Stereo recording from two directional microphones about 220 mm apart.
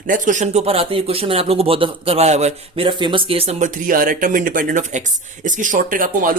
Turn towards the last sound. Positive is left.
turn(degrees=-40)  # may be behind; listen again after turning